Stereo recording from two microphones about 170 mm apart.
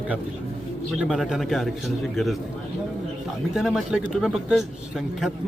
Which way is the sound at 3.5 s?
Centre (ahead or behind).